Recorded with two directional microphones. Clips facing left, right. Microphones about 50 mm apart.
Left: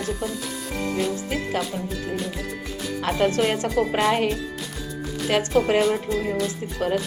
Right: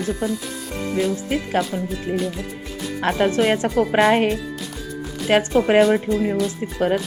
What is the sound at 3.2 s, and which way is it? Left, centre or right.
Speech, right.